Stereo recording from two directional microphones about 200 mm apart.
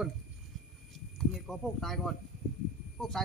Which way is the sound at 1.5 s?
Centre (ahead or behind).